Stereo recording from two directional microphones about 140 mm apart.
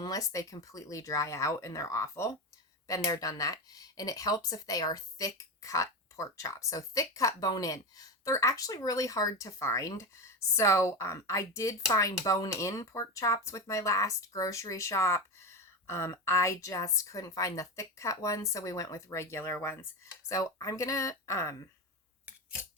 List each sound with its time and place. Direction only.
0.0 s speech: 25° left (ahead or behind)